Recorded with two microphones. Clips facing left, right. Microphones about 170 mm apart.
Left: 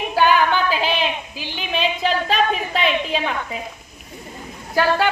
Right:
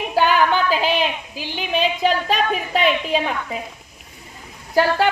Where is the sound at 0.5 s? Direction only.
40° right (ahead or behind).